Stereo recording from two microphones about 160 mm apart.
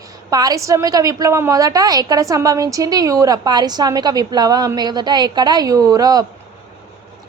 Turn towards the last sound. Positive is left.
turn(degrees=-25)  # may be behind; listen again after turning